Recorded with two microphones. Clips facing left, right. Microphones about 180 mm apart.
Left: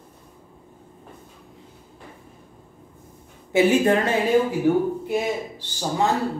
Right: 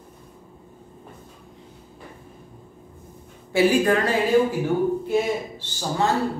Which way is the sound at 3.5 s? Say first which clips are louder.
Left 1 dB; 20° left (ahead or behind).